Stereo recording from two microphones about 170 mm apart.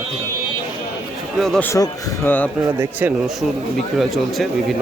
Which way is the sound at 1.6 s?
15° left (ahead or behind).